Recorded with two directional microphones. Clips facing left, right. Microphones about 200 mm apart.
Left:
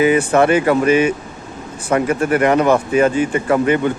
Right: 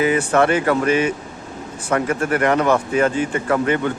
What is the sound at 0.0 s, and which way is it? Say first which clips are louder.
Speech: left 3 dB; 15° left (ahead or behind).